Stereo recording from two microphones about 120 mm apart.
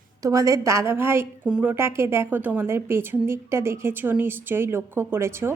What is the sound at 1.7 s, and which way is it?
A woman's voice, 20° right (ahead or behind).